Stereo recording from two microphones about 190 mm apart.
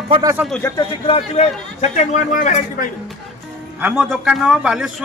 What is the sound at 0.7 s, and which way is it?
A man's voice, 30° left (ahead or behind).